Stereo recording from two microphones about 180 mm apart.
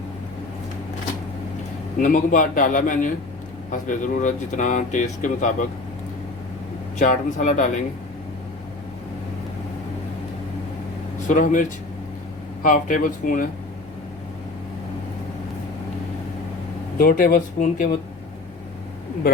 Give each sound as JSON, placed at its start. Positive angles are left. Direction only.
{"t": 2.0, "sound": "speech", "side_deg": 45}
{"t": 7.0, "sound": "speech", "side_deg": 45}
{"t": 11.3, "sound": "speech", "side_deg": 45}
{"t": 12.6, "sound": "speech", "side_deg": 50}
{"t": 17.0, "sound": "speech", "side_deg": 50}